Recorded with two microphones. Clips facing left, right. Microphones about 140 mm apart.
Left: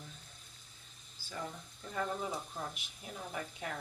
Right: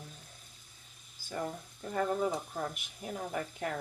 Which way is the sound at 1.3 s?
45° right (ahead or behind).